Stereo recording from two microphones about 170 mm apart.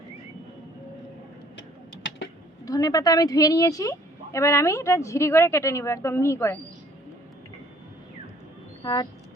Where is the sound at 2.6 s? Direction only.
20° left (ahead or behind).